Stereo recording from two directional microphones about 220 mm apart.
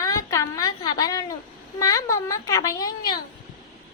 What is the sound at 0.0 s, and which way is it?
A woman's voice, 15° left (ahead or behind).